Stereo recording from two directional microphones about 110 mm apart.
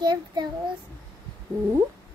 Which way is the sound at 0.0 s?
40° right (ahead or behind).